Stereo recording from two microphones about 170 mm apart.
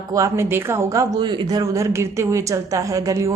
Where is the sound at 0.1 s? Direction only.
15° right (ahead or behind).